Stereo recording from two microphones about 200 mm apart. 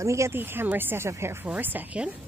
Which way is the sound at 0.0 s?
15° right (ahead or behind).